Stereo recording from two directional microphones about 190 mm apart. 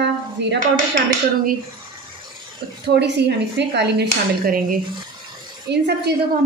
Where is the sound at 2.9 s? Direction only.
65° right (ahead or behind).